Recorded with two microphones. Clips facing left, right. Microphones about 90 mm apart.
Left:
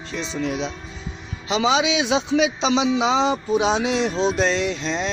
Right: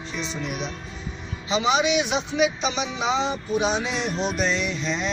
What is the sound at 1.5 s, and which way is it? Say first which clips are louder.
A man's voice: left 2 dB; 90° left.